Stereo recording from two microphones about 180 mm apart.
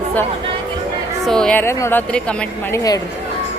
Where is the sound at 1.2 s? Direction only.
5° left (ahead or behind).